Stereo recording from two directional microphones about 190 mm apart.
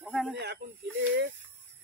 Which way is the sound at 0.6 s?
45° right (ahead or behind).